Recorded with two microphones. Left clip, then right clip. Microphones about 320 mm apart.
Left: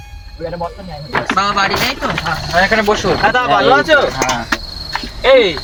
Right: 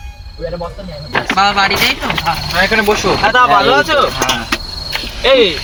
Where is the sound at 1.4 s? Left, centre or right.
Left.